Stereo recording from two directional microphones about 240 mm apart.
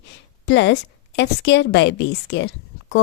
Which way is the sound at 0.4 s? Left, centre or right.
Left.